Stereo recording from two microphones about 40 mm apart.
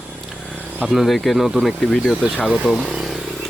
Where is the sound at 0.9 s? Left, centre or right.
Centre.